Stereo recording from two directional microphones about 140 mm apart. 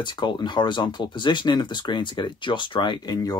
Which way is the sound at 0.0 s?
35° left (ahead or behind).